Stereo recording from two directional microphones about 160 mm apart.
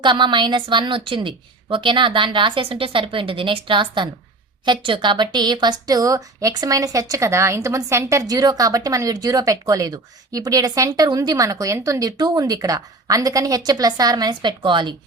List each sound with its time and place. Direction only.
0.0 s a woman's voice: 30° right (ahead or behind)